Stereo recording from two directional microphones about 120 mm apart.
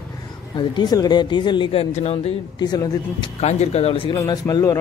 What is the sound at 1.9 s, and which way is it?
Speech, 65° left (ahead or behind).